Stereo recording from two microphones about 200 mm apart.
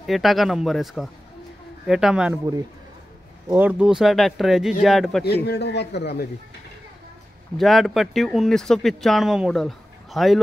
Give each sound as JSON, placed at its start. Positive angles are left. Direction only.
{"t": 0.0, "sound": "speech", "side_deg": 0}
{"t": 3.4, "sound": "speech", "side_deg": -10}
{"t": 5.2, "sound": "a man's voice", "side_deg": 55}
{"t": 7.5, "sound": "speech", "side_deg": 0}